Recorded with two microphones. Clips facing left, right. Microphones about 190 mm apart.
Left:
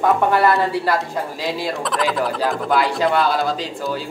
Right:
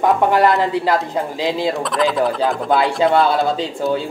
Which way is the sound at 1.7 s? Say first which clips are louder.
Right 3 dB; centre (ahead or behind).